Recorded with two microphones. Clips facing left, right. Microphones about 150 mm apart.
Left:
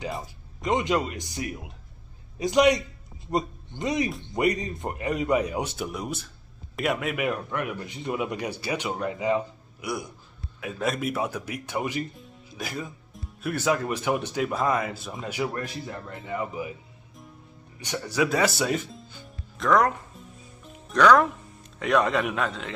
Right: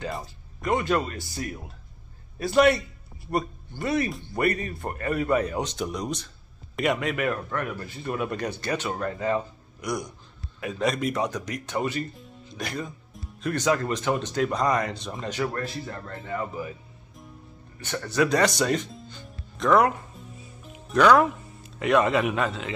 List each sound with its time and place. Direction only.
0.2 s a man's voice: 20° left (ahead or behind)
16.1 s speech: centre (ahead or behind)
16.3 s speech: 10° left (ahead or behind)
17.7 s speech: 15° left (ahead or behind)
19.7 s music: 5° right (ahead or behind)